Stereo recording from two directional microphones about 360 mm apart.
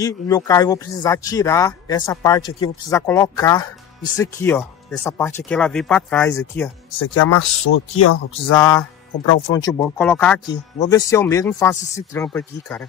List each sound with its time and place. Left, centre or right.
0.0 s speech: centre
7.0 s speech: left
8.5 s speech: centre